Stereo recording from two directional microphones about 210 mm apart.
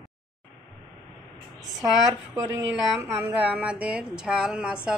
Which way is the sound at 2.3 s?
15° right (ahead or behind).